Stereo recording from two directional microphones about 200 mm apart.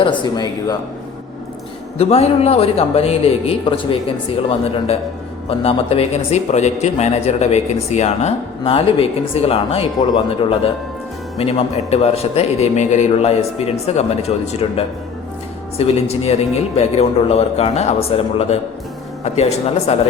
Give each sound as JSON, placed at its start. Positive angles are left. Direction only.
{"t": 0.0, "sound": "speech", "side_deg": 20}
{"t": 2.0, "sound": "speech", "side_deg": 30}
{"t": 16.0, "sound": "speech", "side_deg": 30}